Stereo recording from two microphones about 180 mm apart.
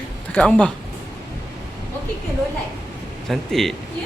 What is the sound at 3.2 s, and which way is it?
Speech, centre (ahead or behind).